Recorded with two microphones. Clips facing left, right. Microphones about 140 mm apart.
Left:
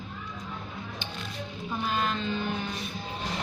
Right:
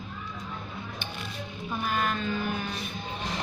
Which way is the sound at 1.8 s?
25° left (ahead or behind).